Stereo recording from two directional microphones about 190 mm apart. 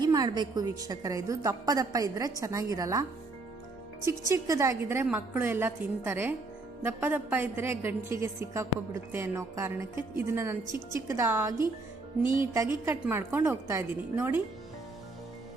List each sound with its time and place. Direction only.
0.0 s a woman's voice: 20° right (ahead or behind)
4.3 s a woman's voice: 15° right (ahead or behind)